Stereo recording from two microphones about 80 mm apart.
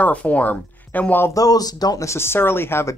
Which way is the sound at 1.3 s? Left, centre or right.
Left.